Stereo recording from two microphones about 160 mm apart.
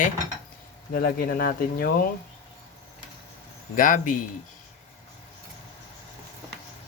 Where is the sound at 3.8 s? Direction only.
55° left (ahead or behind).